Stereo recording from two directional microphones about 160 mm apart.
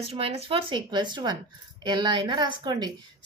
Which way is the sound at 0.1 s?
40° right (ahead or behind).